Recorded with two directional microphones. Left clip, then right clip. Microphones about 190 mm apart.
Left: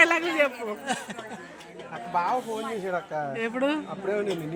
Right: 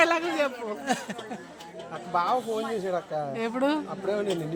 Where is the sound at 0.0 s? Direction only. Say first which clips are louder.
Left 2 dB; 5° left (ahead or behind).